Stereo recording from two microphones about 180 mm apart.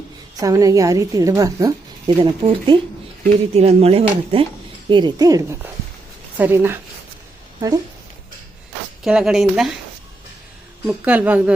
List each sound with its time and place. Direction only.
0.3 s a woman's voice: 20° right (ahead or behind)
9.0 s speech: 5° right (ahead or behind)
10.8 s a woman's voice: 5° right (ahead or behind)